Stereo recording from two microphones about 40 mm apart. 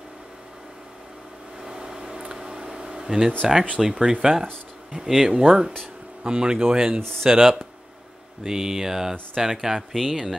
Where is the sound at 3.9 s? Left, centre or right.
Centre.